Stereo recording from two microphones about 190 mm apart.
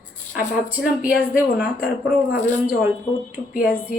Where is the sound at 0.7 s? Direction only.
5° right (ahead or behind).